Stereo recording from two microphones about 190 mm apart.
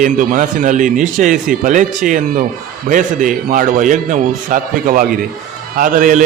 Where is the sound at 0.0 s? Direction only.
45° right (ahead or behind).